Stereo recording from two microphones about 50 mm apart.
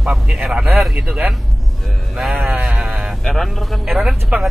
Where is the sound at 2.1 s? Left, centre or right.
Centre.